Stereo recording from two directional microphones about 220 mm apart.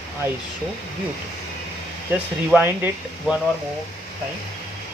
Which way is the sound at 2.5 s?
10° right (ahead or behind).